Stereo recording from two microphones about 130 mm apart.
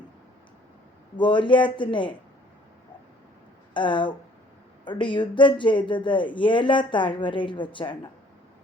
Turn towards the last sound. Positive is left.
turn(degrees=40)  # may be behind; listen again after turning